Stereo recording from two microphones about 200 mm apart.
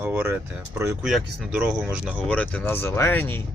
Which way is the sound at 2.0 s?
5° left (ahead or behind).